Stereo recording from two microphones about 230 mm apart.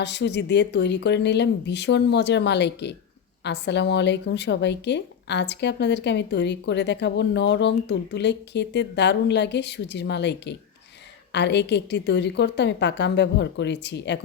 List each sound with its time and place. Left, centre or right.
0.0 s a woman's voice: left